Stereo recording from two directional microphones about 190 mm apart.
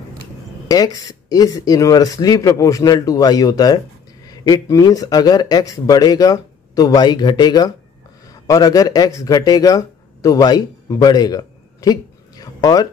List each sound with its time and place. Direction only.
0.7 s speech: 20° left (ahead or behind)